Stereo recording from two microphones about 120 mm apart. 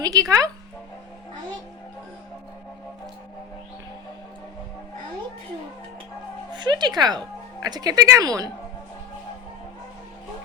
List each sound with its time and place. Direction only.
0.0 s speech: 30° right (ahead or behind)
6.5 s speech: 40° right (ahead or behind)